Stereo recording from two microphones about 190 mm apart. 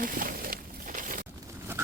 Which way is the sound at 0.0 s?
45° right (ahead or behind).